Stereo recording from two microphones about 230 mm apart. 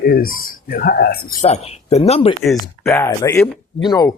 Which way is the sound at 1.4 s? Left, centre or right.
Left.